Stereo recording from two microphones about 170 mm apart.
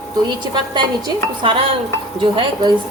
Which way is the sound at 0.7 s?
30° right (ahead or behind).